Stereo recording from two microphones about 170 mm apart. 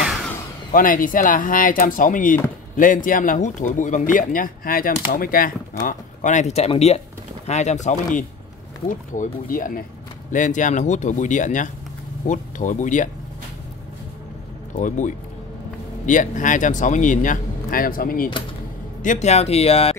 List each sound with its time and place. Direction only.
0.7 s speech: 55° left (ahead or behind)
14.8 s speech: 45° left (ahead or behind)
19.0 s speech: 40° left (ahead or behind)